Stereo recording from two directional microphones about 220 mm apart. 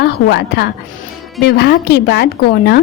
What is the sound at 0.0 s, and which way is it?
A woman's voice, 50° left (ahead or behind).